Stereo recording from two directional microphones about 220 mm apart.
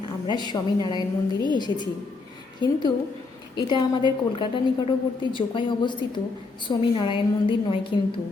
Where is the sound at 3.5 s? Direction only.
20° left (ahead or behind).